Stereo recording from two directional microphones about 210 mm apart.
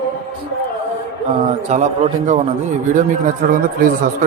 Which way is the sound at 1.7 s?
35° right (ahead or behind).